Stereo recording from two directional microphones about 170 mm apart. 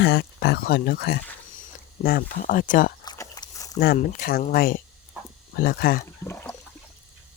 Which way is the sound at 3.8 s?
60° left (ahead or behind).